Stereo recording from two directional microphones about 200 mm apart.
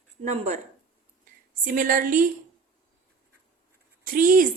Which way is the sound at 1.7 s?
45° right (ahead or behind).